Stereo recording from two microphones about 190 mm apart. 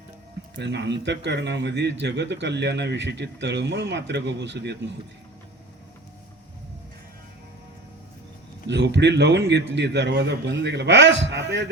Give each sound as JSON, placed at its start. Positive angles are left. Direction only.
{"t": 0.5, "sound": "speech", "side_deg": -65}
{"t": 8.6, "sound": "a man's voice", "side_deg": -65}